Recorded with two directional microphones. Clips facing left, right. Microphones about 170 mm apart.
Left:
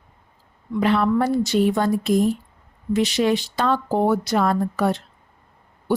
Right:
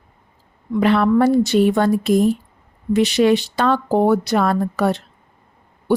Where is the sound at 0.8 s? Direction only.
70° right (ahead or behind).